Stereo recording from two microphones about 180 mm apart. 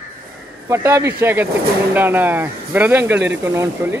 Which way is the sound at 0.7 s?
15° right (ahead or behind).